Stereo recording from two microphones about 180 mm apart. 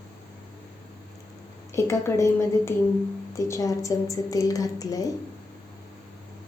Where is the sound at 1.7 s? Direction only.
15° left (ahead or behind).